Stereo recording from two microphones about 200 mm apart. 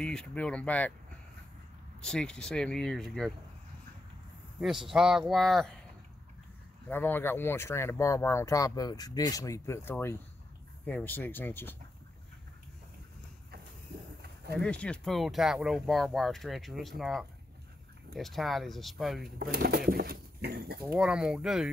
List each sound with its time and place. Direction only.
0.0 s speech: 5° left (ahead or behind)
2.0 s speech: 5° left (ahead or behind)
4.6 s speech: centre (ahead or behind)
6.9 s speech: 10° left (ahead or behind)
14.2 s pigeon: 55° right (ahead or behind)
14.6 s speech: 5° left (ahead or behind)
19.3 s speech: 50° right (ahead or behind)
20.8 s speech: 5° right (ahead or behind)